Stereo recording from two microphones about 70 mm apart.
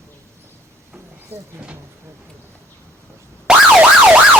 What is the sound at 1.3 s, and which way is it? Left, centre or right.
Speech, right.